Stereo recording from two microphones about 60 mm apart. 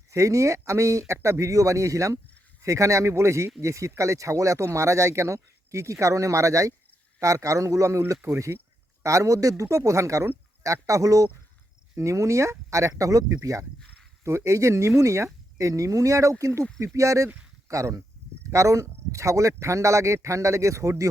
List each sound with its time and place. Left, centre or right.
0.1 s speech: right
9.0 s speech: right
11.9 s speech: right